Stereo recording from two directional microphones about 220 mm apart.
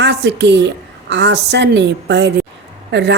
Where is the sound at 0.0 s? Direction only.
50° right (ahead or behind).